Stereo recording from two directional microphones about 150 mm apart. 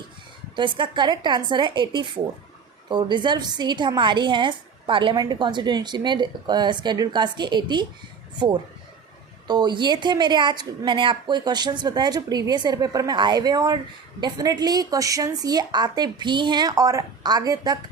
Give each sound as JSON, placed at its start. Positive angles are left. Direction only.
{"t": 0.5, "sound": "a woman's voice", "side_deg": -30}
{"t": 9.5, "sound": "a woman's voice", "side_deg": -30}